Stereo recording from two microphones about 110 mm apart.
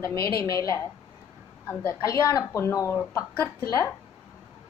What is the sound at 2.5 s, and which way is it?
A woman's voice, 30° left (ahead or behind).